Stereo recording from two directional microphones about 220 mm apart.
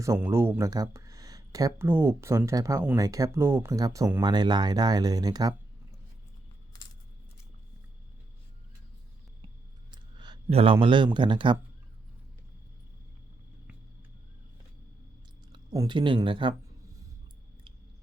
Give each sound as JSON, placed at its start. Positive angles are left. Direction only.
{"t": 0.0, "sound": "speech", "side_deg": -15}
{"t": 9.9, "sound": "speech", "side_deg": -20}
{"t": 15.5, "sound": "speech", "side_deg": -20}